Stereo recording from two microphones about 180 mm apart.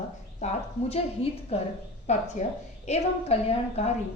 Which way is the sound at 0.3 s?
35° left (ahead or behind).